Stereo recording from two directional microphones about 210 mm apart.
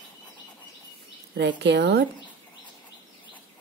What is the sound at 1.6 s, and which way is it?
Speech, 55° right (ahead or behind).